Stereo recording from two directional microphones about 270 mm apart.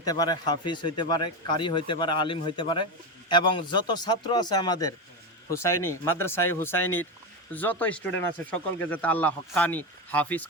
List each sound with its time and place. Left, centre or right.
0.0 s speech: centre